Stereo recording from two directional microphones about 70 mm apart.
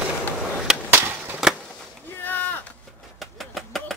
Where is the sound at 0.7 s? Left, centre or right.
Centre.